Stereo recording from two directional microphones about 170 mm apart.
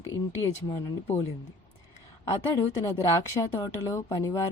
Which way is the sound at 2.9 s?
20° left (ahead or behind).